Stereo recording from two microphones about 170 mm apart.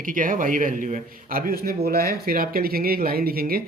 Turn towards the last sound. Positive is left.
turn(degrees=-60)  # may be behind; listen again after turning